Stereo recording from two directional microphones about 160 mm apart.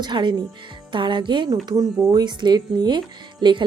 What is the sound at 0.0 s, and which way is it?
Speech, 30° right (ahead or behind).